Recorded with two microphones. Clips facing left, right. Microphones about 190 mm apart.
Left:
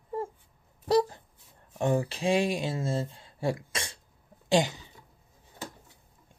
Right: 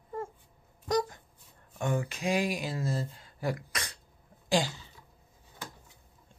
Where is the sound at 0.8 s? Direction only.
30° left (ahead or behind).